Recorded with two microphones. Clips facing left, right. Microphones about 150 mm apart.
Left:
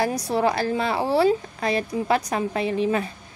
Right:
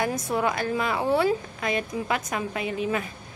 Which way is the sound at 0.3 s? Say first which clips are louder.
Left 5 dB; 30° left (ahead or behind).